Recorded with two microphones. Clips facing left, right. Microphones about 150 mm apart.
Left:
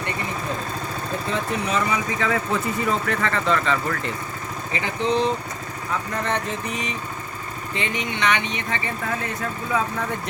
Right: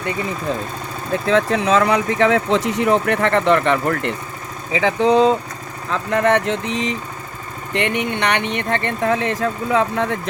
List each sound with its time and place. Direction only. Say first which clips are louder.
1.3 s speech: right 10 dB; 90° right; by 4.1 s 65° right (ahead or behind)
4.8 s speech: right 8 dB; 90° right
5.9 s speech: right 9 dB; 75° right (ahead or behind)
7.7 s speech: right 7 dB; 65° right (ahead or behind); by 10.2 s 85° right